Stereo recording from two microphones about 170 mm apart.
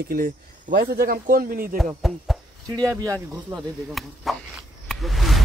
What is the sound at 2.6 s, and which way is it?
Speech, 20° right (ahead or behind).